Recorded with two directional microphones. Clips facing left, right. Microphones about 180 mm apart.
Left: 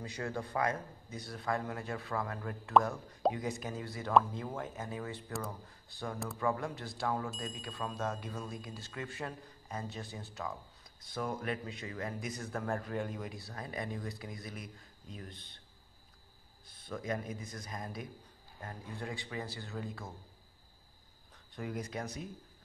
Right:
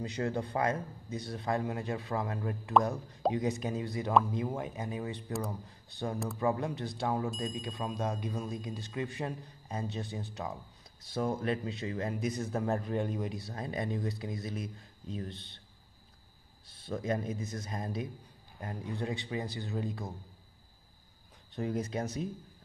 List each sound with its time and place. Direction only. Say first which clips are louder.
0.0 s speech: right 5 dB; 25° right (ahead or behind)
16.8 s speech: right 5 dB; 30° right (ahead or behind)
21.5 s speech: right 6 dB; 25° right (ahead or behind)